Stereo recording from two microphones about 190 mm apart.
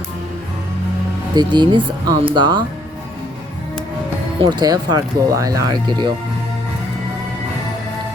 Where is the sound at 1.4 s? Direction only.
25° right (ahead or behind).